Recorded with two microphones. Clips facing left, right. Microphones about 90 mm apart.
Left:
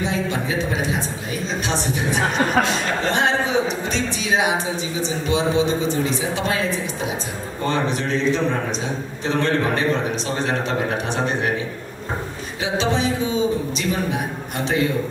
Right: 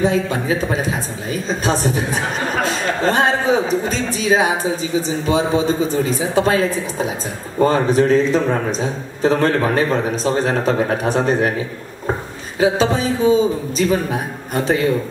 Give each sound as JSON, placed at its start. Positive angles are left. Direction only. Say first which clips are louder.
{"t": 0.0, "sound": "a woman's voice", "louder": "right 5 dB", "side_deg": -40}
{"t": 12.5, "sound": "a woman's voice", "louder": "right 6 dB", "side_deg": -35}